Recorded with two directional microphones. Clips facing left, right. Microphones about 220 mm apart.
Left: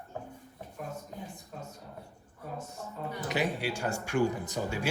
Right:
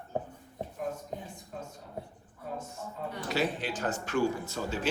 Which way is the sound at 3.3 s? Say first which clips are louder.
Even; 15° left (ahead or behind).